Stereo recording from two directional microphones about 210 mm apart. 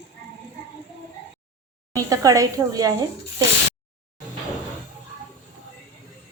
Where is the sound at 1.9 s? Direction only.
15° right (ahead or behind).